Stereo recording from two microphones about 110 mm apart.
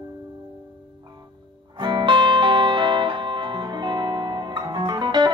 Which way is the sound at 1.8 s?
45° right (ahead or behind).